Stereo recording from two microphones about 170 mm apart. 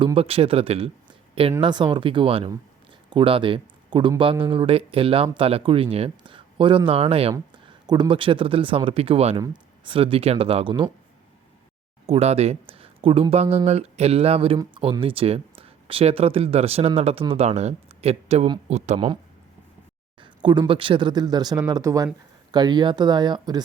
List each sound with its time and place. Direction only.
0.0 s speech: 30° right (ahead or behind)
12.0 s speech: 35° right (ahead or behind)
20.2 s speech: 25° right (ahead or behind)